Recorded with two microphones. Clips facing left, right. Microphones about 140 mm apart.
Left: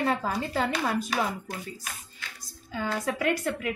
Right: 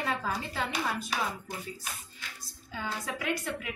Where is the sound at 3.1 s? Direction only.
60° left (ahead or behind).